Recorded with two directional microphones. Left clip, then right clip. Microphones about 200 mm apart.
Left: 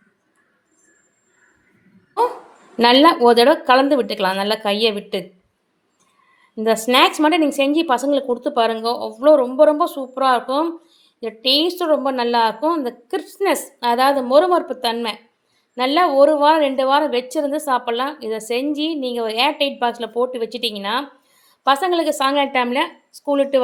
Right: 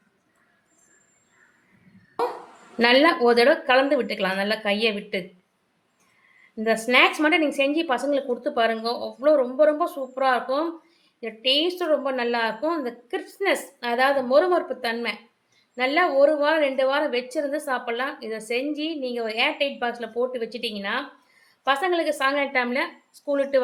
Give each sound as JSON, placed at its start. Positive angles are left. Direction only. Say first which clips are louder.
{"t": 2.7, "sound": "a woman's voice", "louder": "left 5 dB", "side_deg": 30}
{"t": 6.6, "sound": "a woman's voice", "louder": "left 4 dB", "side_deg": 30}